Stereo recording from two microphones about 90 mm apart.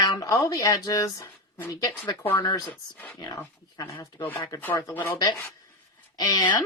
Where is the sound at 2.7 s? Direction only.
20° left (ahead or behind).